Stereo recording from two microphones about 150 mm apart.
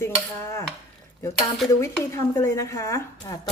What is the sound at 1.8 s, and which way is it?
Speech, 20° left (ahead or behind).